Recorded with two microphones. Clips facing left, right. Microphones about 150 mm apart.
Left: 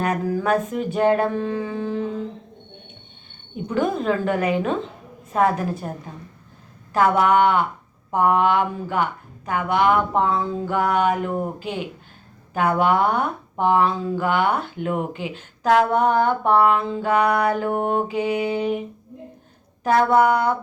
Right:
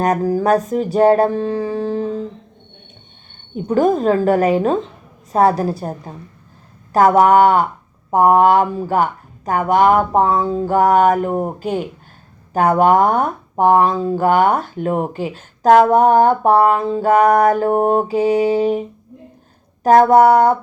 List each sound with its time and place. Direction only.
0.0 s speech: 40° right (ahead or behind)
3.5 s speech: 45° right (ahead or behind)
6.9 s speech: 40° right (ahead or behind)